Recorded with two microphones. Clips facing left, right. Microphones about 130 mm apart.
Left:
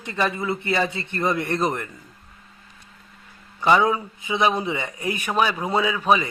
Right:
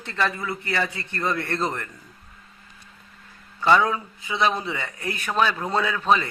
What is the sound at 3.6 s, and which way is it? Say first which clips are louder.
A man's voice: left 1 dB; 15° left (ahead or behind).